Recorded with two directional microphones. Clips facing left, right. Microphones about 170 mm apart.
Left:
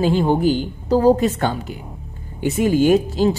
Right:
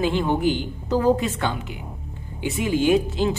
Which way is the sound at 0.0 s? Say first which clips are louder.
Left 4 dB; 35° left (ahead or behind).